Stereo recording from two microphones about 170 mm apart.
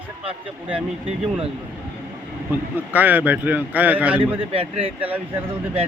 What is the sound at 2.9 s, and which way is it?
Speech, 10° right (ahead or behind).